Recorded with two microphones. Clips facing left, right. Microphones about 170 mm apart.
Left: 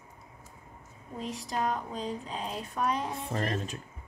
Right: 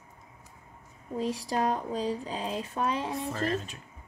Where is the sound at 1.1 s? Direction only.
35° right (ahead or behind).